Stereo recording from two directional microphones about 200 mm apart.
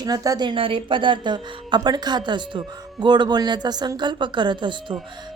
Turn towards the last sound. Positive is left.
turn(degrees=-25)  # may be behind; listen again after turning